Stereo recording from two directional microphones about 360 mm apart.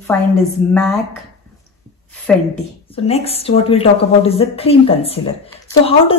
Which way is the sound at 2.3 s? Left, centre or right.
Centre.